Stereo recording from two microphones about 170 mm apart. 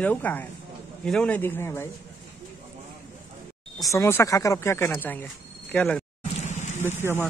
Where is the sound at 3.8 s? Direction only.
15° left (ahead or behind).